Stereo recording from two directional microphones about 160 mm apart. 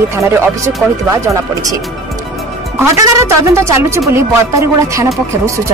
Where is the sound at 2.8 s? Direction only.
20° right (ahead or behind).